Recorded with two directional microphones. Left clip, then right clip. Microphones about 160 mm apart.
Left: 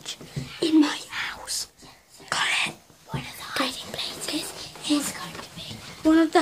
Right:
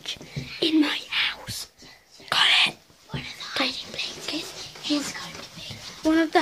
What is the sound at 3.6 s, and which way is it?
Whispering, 30° left (ahead or behind).